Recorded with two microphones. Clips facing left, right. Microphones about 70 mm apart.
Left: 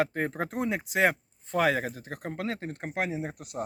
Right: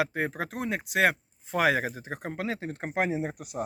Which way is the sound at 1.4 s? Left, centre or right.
Centre.